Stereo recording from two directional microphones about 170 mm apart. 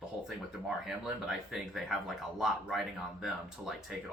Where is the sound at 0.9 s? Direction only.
Centre (ahead or behind).